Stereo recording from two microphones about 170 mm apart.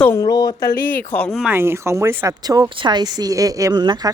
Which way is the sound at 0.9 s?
10° left (ahead or behind).